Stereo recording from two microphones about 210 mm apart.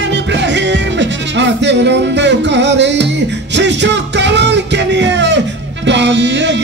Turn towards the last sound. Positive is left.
turn(degrees=-60)  # may be behind; listen again after turning